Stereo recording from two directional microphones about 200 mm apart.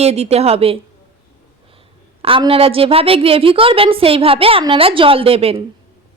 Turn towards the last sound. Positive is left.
turn(degrees=-30)  # may be behind; listen again after turning